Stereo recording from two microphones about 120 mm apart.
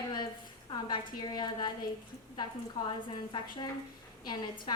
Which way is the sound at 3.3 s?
40° left (ahead or behind).